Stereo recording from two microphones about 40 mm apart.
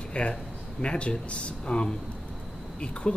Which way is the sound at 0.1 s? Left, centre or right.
Left.